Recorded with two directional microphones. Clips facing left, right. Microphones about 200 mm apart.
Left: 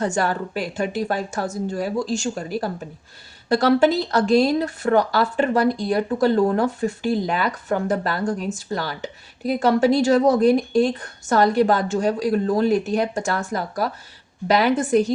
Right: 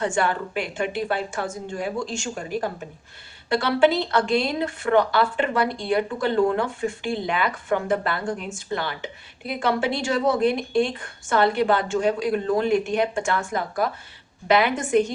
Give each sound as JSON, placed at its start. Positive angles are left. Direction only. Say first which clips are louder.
{"t": 0.0, "sound": "speech", "louder": "left 1 dB", "side_deg": 40}